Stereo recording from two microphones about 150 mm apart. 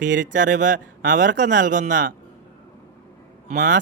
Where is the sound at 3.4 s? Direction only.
65° right (ahead or behind).